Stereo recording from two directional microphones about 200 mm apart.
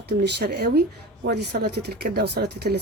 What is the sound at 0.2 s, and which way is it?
Speech, 55° right (ahead or behind).